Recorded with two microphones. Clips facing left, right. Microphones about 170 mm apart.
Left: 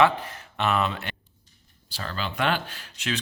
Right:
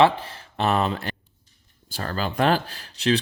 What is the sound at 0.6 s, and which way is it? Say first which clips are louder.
Speech: right 3 dB; 35° right (ahead or behind).